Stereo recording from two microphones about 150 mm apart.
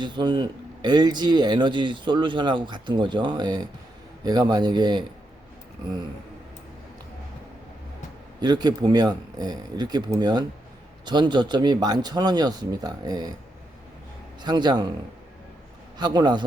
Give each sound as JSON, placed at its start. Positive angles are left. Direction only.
{"t": 0.0, "sound": "speech", "side_deg": -30}
{"t": 8.4, "sound": "speech", "side_deg": -30}
{"t": 14.4, "sound": "speech", "side_deg": -30}
{"t": 16.0, "sound": "speech", "side_deg": -30}